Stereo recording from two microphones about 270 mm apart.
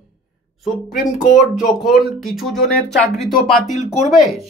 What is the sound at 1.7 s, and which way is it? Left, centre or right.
Speech, centre.